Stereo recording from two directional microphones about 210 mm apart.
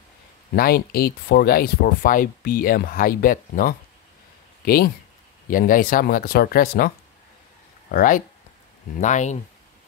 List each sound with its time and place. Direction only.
0.6 s speech: 45° left (ahead or behind)
7.9 s speech: 40° left (ahead or behind)